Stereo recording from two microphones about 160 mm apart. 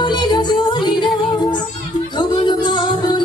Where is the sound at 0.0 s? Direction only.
30° left (ahead or behind).